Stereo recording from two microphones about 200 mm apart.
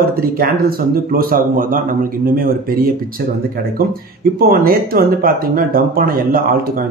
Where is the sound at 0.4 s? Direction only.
45° right (ahead or behind).